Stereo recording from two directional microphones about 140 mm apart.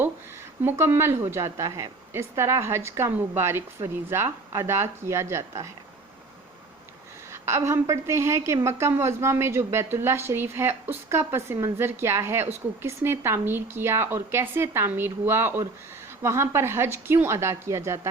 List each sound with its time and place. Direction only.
0.6 s a woman's voice: 15° right (ahead or behind)
7.3 s a woman's voice: 20° right (ahead or behind)